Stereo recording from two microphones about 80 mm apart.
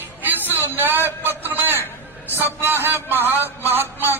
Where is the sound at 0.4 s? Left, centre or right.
Left.